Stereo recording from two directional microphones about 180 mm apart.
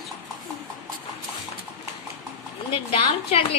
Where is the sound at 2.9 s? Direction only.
35° left (ahead or behind).